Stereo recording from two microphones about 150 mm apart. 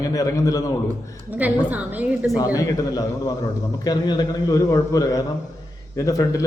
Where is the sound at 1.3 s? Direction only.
10° right (ahead or behind).